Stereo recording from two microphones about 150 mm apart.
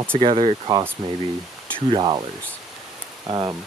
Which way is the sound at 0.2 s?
35° right (ahead or behind).